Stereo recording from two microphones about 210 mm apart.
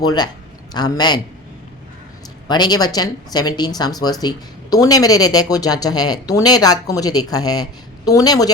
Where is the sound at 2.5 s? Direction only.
20° left (ahead or behind).